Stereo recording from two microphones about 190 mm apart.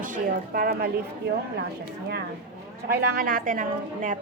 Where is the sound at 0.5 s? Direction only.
50° right (ahead or behind).